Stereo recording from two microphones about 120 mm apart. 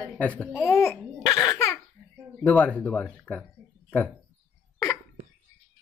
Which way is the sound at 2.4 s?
5° left (ahead or behind).